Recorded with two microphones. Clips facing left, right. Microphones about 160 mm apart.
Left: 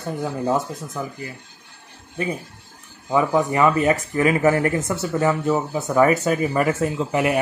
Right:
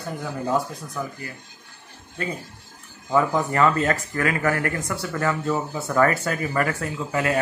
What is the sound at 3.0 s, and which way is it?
Speech, 15° left (ahead or behind).